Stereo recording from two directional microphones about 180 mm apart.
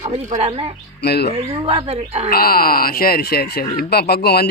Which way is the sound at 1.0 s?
65° left (ahead or behind).